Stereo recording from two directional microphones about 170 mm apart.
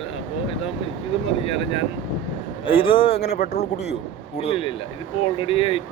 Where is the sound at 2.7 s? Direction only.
30° left (ahead or behind).